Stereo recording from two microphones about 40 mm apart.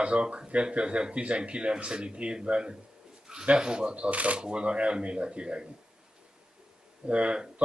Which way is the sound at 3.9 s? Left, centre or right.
Right.